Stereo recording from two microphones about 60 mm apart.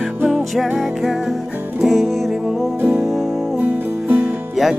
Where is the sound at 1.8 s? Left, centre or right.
Centre.